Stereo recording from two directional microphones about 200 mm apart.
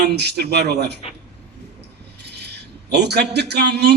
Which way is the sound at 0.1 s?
55° right (ahead or behind).